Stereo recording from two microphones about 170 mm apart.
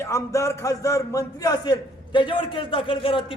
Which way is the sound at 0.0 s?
15° left (ahead or behind).